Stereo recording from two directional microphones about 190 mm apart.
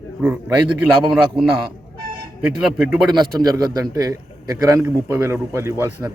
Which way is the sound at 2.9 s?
Centre (ahead or behind).